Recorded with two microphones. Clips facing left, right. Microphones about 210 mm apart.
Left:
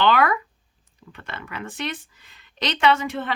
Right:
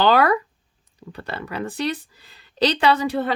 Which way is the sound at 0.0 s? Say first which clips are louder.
Right 3 dB; 35° right (ahead or behind).